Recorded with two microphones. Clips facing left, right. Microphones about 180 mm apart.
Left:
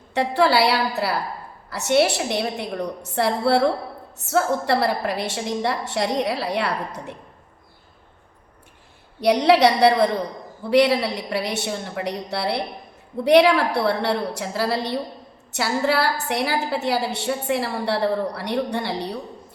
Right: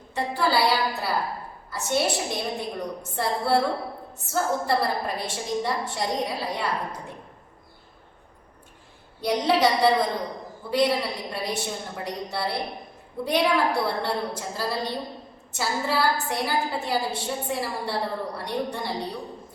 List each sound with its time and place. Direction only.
0.1 s a woman's voice: 70° left (ahead or behind)
9.2 s a woman's voice: 75° left (ahead or behind)